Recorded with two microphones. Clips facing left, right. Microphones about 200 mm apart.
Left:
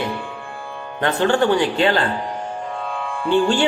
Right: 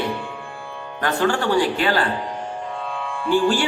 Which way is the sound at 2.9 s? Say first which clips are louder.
Left 2 dB; 45° left (ahead or behind).